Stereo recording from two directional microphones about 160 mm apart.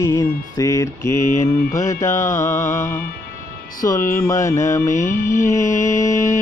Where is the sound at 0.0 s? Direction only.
20° left (ahead or behind).